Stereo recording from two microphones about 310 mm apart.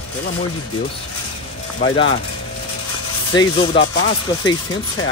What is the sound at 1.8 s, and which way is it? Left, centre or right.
Speech, centre.